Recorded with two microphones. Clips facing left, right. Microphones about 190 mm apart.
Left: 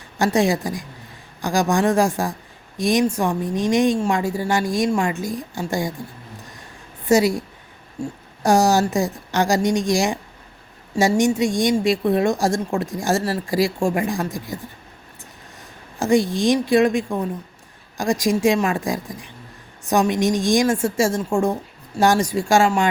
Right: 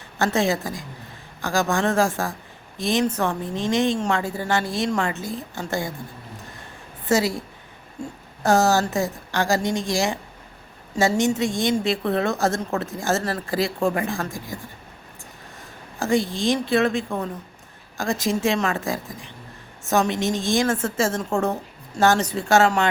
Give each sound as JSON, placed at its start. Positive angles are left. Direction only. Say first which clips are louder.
{"t": 0.2, "sound": "a woman's voice", "louder": "left 3 dB", "side_deg": 15}
{"t": 7.0, "sound": "a woman's voice", "louder": "left 5 dB", "side_deg": 15}
{"t": 8.4, "sound": "a woman's voice", "louder": "left 2 dB", "side_deg": 15}
{"t": 16.0, "sound": "a woman's voice", "louder": "left 4 dB", "side_deg": 15}